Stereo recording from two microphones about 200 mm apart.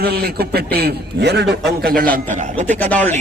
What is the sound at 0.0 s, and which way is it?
A man's voice, 55° right (ahead or behind).